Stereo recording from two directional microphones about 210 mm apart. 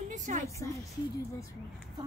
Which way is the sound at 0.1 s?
35° right (ahead or behind).